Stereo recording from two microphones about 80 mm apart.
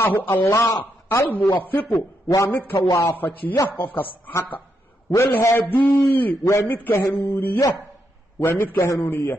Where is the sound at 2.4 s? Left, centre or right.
Left.